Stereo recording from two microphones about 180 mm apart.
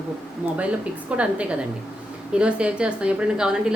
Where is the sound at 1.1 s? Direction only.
5° right (ahead or behind).